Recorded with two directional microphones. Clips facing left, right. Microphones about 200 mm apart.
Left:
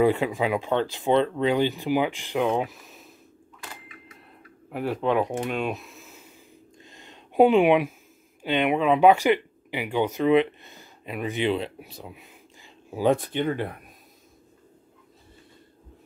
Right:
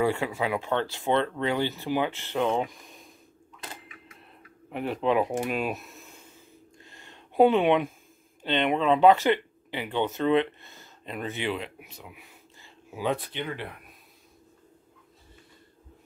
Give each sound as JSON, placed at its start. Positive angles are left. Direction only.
{"t": 0.0, "sound": "speech", "side_deg": 20}
{"t": 4.6, "sound": "speech", "side_deg": 0}
{"t": 6.8, "sound": "a sound", "side_deg": 20}
{"t": 8.4, "sound": "speech", "side_deg": 10}
{"t": 11.5, "sound": "speech", "side_deg": 35}
{"t": 12.2, "sound": "whispering", "side_deg": 20}
{"t": 12.9, "sound": "speech", "side_deg": 45}